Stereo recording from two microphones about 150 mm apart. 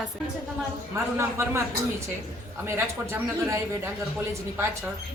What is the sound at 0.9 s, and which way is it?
Speech, 15° right (ahead or behind).